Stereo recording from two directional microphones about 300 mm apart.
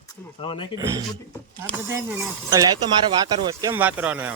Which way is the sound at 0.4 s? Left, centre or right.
Centre.